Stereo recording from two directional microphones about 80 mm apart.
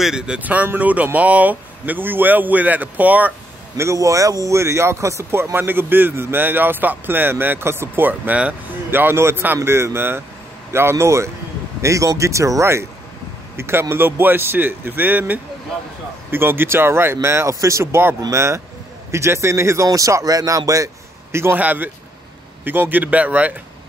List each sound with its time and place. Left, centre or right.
0.0 s speech: centre
3.7 s speech: right; by 8.5 s centre
8.9 s speech: right
21.5 s speech: right